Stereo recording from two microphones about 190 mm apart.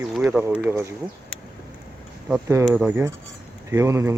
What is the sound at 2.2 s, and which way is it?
Speech, 10° right (ahead or behind).